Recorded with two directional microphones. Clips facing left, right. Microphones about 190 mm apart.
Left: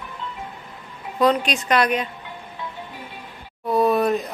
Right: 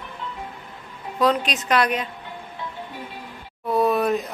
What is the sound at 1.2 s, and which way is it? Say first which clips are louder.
Speech: left 2 dB; centre (ahead or behind).